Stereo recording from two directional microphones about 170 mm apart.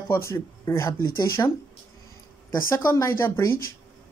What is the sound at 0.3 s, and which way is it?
Speech, 15° left (ahead or behind).